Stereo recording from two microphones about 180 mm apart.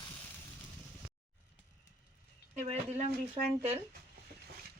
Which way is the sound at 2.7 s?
40° right (ahead or behind).